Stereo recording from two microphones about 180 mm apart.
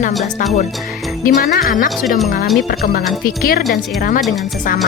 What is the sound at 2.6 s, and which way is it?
Speech, 50° left (ahead or behind).